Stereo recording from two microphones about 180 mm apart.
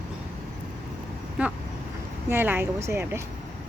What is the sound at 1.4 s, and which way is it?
Speech, 10° right (ahead or behind).